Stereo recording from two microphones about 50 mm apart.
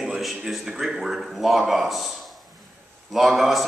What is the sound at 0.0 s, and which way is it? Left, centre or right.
A man's voice, centre.